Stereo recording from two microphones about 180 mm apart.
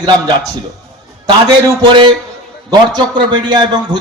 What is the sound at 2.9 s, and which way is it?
Speech, 25° right (ahead or behind).